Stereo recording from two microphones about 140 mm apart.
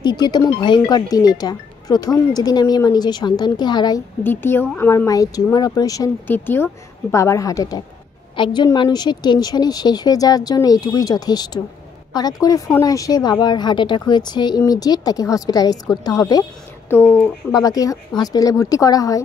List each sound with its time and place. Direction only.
0.0 s speech: 30° left (ahead or behind)
4.2 s speech: 15° left (ahead or behind)
6.2 s speech: 15° left (ahead or behind)